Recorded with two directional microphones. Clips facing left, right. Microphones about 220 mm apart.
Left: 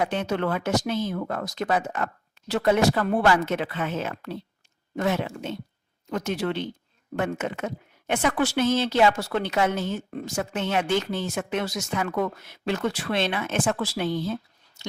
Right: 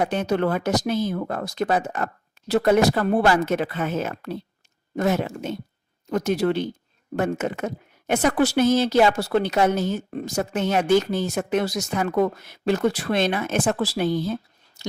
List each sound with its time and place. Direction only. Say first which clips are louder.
0.0 s a woman's voice: right 4 dB; 40° right (ahead or behind)